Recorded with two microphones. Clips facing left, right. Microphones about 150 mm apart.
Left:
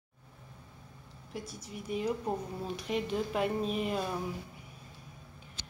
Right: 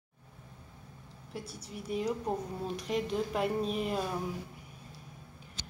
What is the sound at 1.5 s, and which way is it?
Speech, 30° right (ahead or behind).